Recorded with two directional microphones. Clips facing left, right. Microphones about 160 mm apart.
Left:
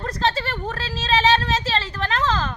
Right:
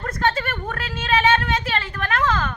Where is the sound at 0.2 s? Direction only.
30° left (ahead or behind).